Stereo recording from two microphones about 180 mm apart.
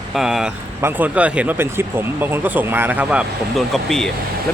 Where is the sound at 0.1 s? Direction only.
Centre (ahead or behind).